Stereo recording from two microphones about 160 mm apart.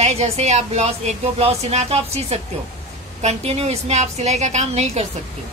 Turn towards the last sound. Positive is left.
turn(degrees=-45)  # may be behind; listen again after turning